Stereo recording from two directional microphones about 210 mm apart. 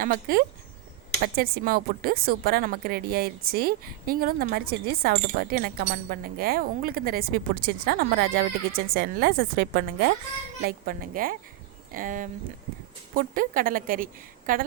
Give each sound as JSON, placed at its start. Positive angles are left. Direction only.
{"t": 0.0, "sound": "a woman's voice", "side_deg": -40}